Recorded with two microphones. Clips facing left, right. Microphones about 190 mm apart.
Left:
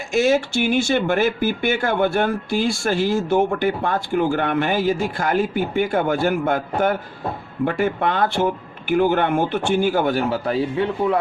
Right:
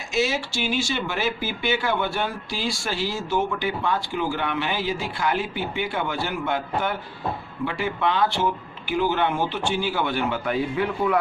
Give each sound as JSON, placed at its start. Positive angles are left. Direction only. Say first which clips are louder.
{"t": 0.1, "sound": "speech", "louder": "left 7 dB", "side_deg": 50}